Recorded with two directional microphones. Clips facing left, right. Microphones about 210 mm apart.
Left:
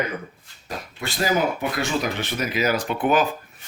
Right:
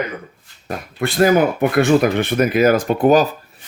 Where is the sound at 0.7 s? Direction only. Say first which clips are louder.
Right 9 dB; 55° right (ahead or behind); by 3.2 s 40° right (ahead or behind).